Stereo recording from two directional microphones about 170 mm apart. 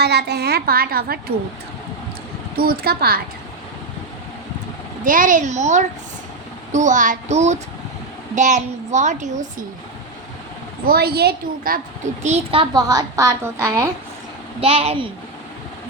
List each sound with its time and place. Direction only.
0.0 s a woman's voice: 75° right (ahead or behind)
2.6 s a woman's voice: 65° right (ahead or behind)
5.0 s a woman's voice: 50° right (ahead or behind)
10.8 s a woman's voice: 65° right (ahead or behind)
12.2 s a woman's voice: 35° right (ahead or behind); by 13.9 s 15° right (ahead or behind)
14.6 s a woman's voice: 35° right (ahead or behind)